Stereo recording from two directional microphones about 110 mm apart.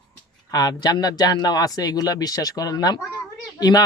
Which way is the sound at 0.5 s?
35° left (ahead or behind).